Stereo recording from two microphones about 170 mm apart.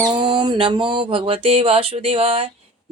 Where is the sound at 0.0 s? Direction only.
30° right (ahead or behind).